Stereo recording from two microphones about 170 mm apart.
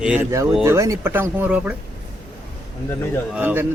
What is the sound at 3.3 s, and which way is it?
Speech, 10° right (ahead or behind).